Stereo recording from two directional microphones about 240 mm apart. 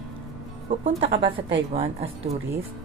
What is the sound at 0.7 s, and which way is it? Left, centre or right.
Speech, right.